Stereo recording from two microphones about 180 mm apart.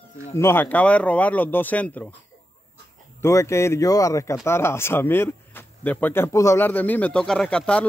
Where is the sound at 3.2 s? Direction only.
15° left (ahead or behind).